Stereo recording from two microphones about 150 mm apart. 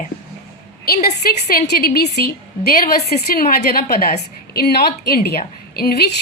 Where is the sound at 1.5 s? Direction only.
85° left.